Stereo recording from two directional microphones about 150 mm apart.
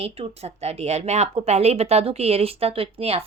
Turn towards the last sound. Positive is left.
turn(degrees=-40)  # may be behind; listen again after turning